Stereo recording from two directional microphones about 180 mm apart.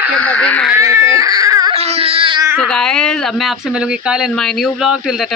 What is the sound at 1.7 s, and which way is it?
Baby cry, 35° right (ahead or behind).